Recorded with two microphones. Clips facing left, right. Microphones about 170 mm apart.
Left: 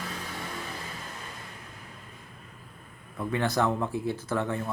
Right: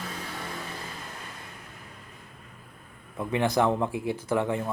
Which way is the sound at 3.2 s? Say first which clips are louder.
Right 2 dB; 15° right (ahead or behind).